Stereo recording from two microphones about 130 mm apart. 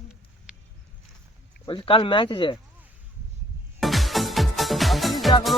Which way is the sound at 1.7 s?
45° left (ahead or behind).